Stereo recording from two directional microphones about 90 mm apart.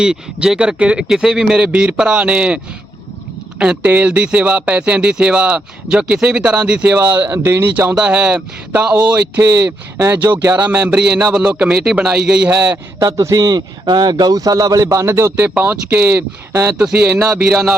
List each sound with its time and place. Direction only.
0.0 s speech: 10° right (ahead or behind)
3.6 s speech: 15° right (ahead or behind)
9.4 s speech: 25° right (ahead or behind)
13.0 s speech: 40° right (ahead or behind)
13.8 s speech: 55° right (ahead or behind); by 16.7 s 25° right (ahead or behind)
16.7 s speech: 10° right (ahead or behind)